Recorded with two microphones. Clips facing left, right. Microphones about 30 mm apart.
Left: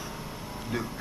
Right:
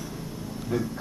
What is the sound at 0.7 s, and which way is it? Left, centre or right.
Speech, left.